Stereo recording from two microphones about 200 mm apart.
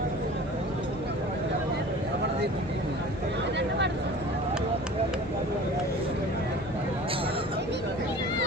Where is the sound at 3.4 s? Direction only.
60° right (ahead or behind).